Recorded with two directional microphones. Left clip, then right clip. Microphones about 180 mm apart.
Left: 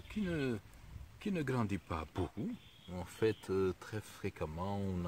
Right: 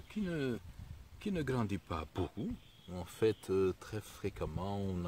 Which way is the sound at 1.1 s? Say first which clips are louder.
Even; 15° right (ahead or behind).